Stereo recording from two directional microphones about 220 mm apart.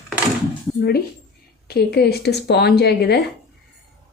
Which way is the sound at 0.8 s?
45° left (ahead or behind).